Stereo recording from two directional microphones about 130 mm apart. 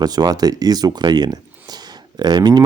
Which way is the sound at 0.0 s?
30° right (ahead or behind).